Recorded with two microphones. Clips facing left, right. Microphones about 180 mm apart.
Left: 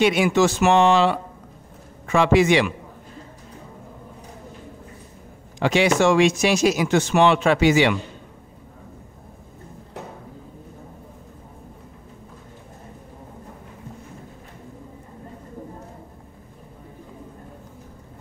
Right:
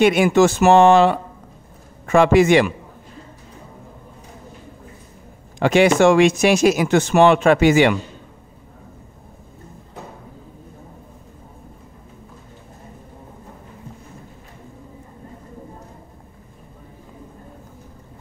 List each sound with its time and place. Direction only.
0.0 s speech: 50° right (ahead or behind)
5.6 s speech: 50° right (ahead or behind)